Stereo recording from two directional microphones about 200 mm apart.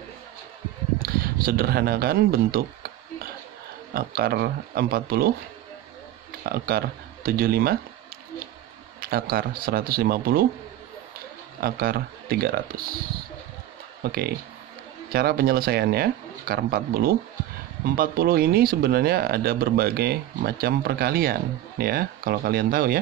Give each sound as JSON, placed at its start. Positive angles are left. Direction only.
{"t": 1.0, "sound": "a sound", "side_deg": -45}
{"t": 3.9, "sound": "speech", "side_deg": -50}
{"t": 6.4, "sound": "speech", "side_deg": -50}
{"t": 9.0, "sound": "speech", "side_deg": -50}
{"t": 11.6, "sound": "speech", "side_deg": -50}
{"t": 14.0, "sound": "speech", "side_deg": -50}